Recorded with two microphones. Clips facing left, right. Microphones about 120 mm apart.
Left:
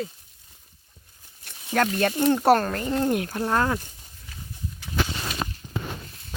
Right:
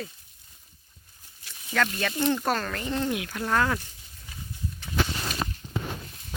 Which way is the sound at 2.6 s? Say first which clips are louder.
Left 4 dB; 35° left (ahead or behind).